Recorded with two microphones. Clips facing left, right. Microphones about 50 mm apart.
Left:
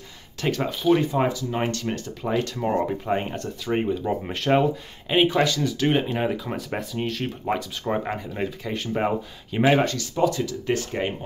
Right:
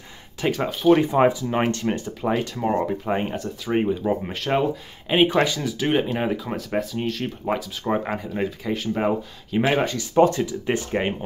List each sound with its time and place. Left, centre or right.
0.4 s speech: centre
0.9 s speech: right; by 9.8 s centre
10.1 s speech: right
10.4 s speech: right